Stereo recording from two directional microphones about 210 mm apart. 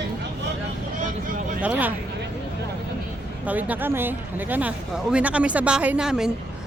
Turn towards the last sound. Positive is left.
turn(degrees=-5)  # may be behind; listen again after turning